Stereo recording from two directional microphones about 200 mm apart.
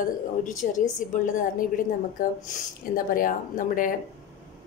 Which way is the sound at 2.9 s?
45° left (ahead or behind).